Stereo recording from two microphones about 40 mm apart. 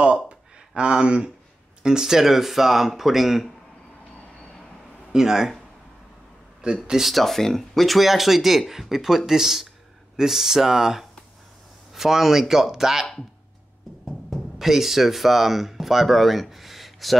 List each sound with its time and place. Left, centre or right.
0.3 s a sound: right
1.8 s speech: centre
5.1 s speech: centre
6.6 s speech: centre
7.1 s speech: centre
14.0 s speech: centre